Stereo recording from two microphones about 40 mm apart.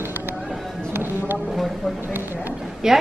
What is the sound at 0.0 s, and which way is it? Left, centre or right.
Music, right.